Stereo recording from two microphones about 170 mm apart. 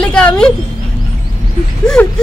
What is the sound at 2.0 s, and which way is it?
Speech, 10° left (ahead or behind).